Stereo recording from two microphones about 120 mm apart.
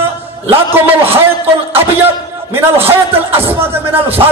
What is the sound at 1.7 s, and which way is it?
A man's voice, 20° right (ahead or behind).